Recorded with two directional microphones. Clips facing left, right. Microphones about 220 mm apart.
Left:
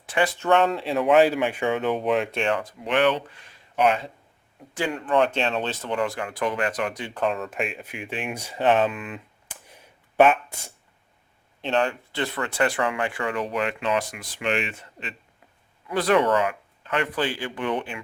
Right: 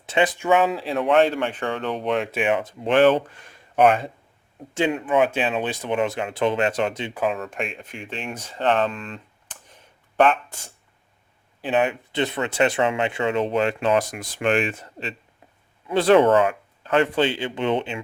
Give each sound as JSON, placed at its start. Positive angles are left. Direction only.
{"t": 0.0, "sound": "speech", "side_deg": -20}
{"t": 0.4, "sound": "speech", "side_deg": 0}
{"t": 2.5, "sound": "speech", "side_deg": -25}
{"t": 3.0, "sound": "speech", "side_deg": -45}
{"t": 4.7, "sound": "speech", "side_deg": -25}
{"t": 5.0, "sound": "speech", "side_deg": -5}
{"t": 7.1, "sound": "speech", "side_deg": -5}
{"t": 11.8, "sound": "speech", "side_deg": -20}
{"t": 15.9, "sound": "speech", "side_deg": -25}